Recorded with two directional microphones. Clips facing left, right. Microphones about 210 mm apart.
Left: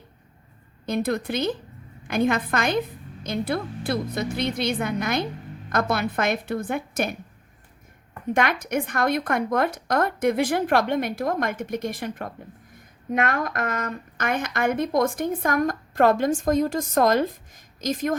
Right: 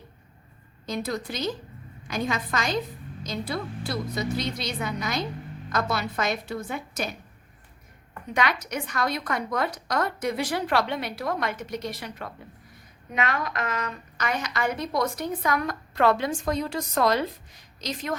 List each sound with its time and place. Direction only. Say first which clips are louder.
0.9 s a woman's voice: left 5 dB; 55° left (ahead or behind)
8.3 s a woman's voice: left 4 dB; 50° left (ahead or behind)